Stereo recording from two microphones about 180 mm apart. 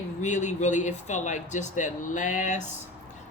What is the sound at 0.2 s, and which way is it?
Speech, 40° left (ahead or behind).